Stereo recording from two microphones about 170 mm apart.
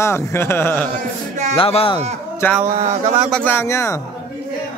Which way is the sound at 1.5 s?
35° left (ahead or behind).